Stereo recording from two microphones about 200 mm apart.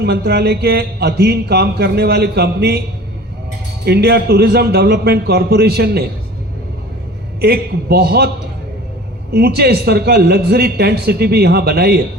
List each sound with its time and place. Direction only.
0.0 s a man's voice: 55° right (ahead or behind)
3.8 s a man's voice: 55° right (ahead or behind)
7.4 s a man's voice: 50° right (ahead or behind)
9.3 s a man's voice: 55° right (ahead or behind)